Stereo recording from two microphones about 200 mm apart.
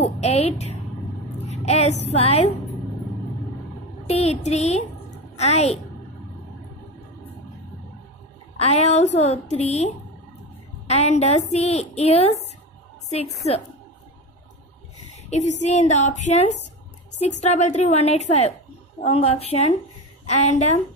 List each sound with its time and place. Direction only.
0.0 s a woman's voice: 30° left (ahead or behind)
4.1 s a woman's voice: 30° left (ahead or behind)
8.5 s a woman's voice: 30° left (ahead or behind)
15.2 s a woman's voice: 35° left (ahead or behind)